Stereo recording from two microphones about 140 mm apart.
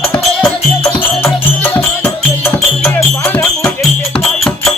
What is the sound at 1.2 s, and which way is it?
Music, 15° left (ahead or behind).